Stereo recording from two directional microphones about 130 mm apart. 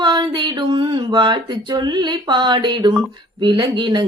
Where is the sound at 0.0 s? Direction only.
35° right (ahead or behind).